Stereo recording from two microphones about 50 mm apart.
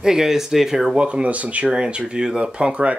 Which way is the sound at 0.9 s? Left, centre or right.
Right.